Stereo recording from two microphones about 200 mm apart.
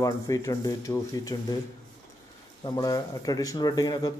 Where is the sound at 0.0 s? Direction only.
15° left (ahead or behind).